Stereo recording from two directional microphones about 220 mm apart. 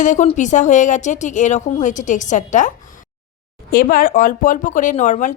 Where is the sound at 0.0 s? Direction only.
35° left (ahead or behind).